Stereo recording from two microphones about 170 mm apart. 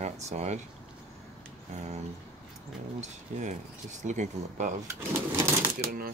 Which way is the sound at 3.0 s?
45° right (ahead or behind).